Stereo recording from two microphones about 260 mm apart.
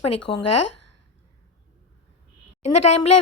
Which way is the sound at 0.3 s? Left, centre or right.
Left.